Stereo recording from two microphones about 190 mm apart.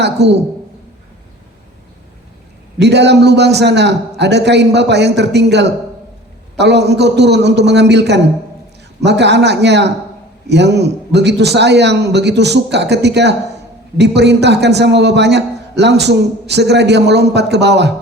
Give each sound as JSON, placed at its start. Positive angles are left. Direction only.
{"t": 0.0, "sound": "a man's voice", "side_deg": -65}
{"t": 2.8, "sound": "a man's voice", "side_deg": -65}